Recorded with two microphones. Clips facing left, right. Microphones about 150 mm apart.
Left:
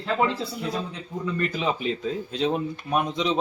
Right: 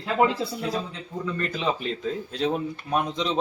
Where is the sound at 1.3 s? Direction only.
5° left (ahead or behind).